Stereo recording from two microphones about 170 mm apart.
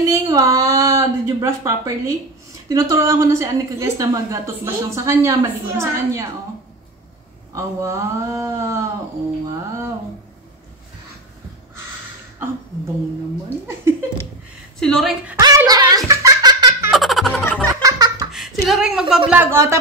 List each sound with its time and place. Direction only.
0.0 s a woman's voice: 20° right (ahead or behind)
7.5 s a woman's voice: 20° right (ahead or behind)
14.8 s a woman's voice: centre (ahead or behind)
15.3 s a sound: 20° right (ahead or behind)
16.1 s giggle: 20° right (ahead or behind)
16.9 s music: centre (ahead or behind)
17.8 s laughter: 20° right (ahead or behind)
18.3 s a woman's voice: centre (ahead or behind)